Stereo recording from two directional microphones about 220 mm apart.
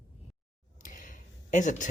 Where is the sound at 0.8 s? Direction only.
40° left (ahead or behind).